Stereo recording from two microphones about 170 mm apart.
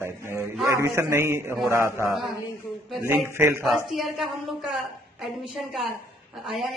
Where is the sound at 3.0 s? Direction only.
15° right (ahead or behind).